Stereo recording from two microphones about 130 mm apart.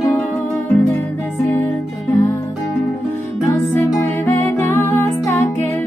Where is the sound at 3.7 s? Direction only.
15° left (ahead or behind).